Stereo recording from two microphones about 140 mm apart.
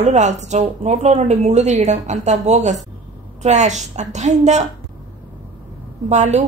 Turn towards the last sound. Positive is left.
turn(degrees=-55)  # may be behind; listen again after turning